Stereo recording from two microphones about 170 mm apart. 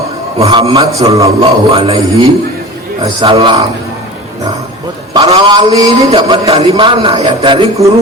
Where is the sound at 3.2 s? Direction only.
35° right (ahead or behind).